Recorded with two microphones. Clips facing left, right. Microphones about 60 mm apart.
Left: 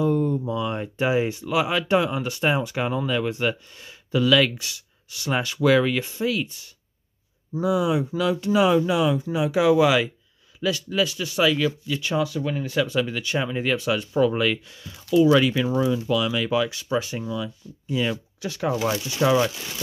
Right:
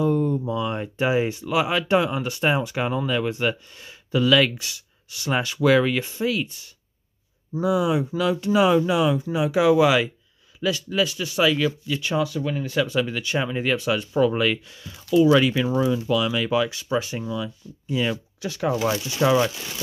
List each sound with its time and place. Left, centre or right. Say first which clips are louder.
0.0 s a sound: even; right
0.5 s speech: right 1 dB; right
7.6 s speech: right 1 dB; right
12.2 s speech: even; centre
12.9 s speech: right 1 dB; right
19.0 s speech: even; centre